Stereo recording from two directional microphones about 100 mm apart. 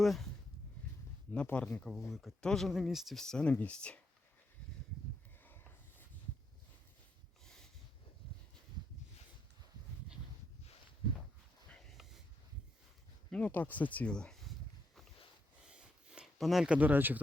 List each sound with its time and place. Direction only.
0.0 s speech: centre (ahead or behind)
1.3 s speech: 15° left (ahead or behind)
2.0 s speech: centre (ahead or behind)
7.4 s a sound: 5° left (ahead or behind)
13.3 s speech: 15° left (ahead or behind)
15.6 s a sound: 10° right (ahead or behind)
16.7 s speech: 15° right (ahead or behind)